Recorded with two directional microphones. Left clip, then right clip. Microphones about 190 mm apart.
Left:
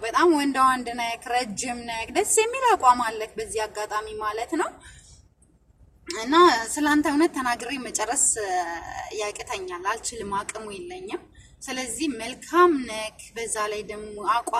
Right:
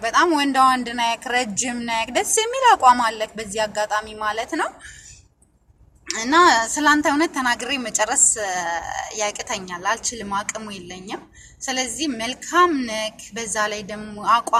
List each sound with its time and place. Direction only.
0.0 s a woman's voice: 15° right (ahead or behind)
6.1 s a woman's voice: 15° right (ahead or behind)